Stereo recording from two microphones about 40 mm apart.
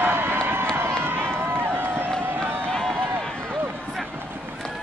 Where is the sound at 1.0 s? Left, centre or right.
Right.